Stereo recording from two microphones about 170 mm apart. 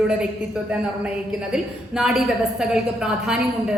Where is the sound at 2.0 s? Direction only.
5° right (ahead or behind).